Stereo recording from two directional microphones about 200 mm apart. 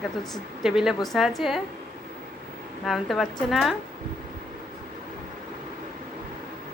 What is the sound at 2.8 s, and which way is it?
Speech, centre (ahead or behind).